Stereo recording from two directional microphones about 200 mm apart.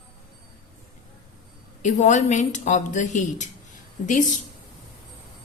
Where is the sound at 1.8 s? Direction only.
35° left (ahead or behind).